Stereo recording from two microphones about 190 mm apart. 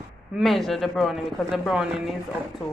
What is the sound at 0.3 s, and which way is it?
Speech, centre (ahead or behind).